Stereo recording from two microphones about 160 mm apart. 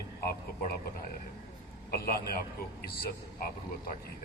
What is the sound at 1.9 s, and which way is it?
A man's voice, 70° left (ahead or behind).